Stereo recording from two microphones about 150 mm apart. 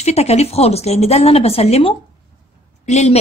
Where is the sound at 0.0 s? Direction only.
45° left (ahead or behind).